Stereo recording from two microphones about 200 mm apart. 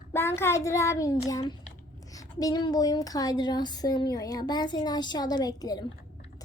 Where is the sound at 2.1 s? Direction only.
20° left (ahead or behind).